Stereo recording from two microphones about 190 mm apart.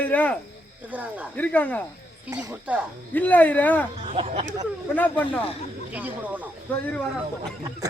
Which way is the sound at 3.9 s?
30° right (ahead or behind).